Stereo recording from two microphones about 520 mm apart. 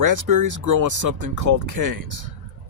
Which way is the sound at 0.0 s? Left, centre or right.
Right.